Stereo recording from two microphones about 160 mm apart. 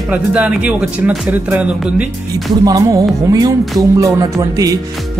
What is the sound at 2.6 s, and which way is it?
Speech, 20° right (ahead or behind).